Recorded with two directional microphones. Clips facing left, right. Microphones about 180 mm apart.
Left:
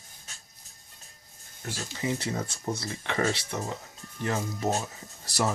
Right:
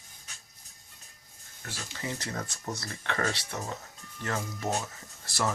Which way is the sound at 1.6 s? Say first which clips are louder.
Left 6 dB; 15° left (ahead or behind).